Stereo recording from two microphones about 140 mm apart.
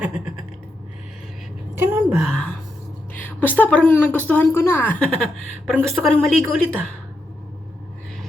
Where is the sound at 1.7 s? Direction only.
15° right (ahead or behind).